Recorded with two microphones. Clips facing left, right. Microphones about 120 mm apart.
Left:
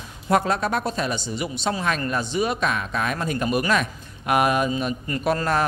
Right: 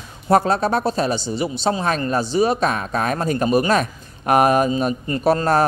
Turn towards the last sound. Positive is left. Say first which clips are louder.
# right 5 dB
turn(degrees=-35)  # may be behind; listen again after turning